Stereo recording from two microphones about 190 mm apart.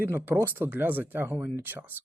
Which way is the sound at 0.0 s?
10° right (ahead or behind).